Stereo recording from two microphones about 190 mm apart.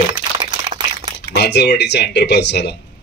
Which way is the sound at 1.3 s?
60° left (ahead or behind).